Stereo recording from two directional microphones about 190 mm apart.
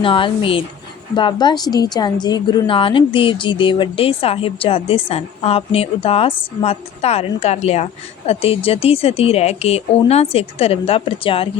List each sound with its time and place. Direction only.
0.0 s a woman's voice: 30° left (ahead or behind)